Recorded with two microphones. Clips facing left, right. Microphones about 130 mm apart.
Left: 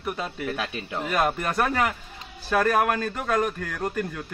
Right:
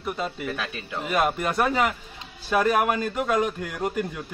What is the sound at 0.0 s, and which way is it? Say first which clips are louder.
A man's voice: right 1 dB; centre (ahead or behind).